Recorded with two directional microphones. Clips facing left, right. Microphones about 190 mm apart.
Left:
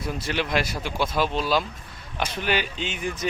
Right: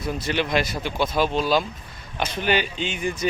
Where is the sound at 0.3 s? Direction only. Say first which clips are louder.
Right 2 dB; 5° left (ahead or behind).